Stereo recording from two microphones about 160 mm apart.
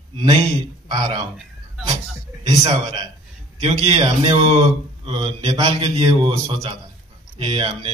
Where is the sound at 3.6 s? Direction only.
40° right (ahead or behind).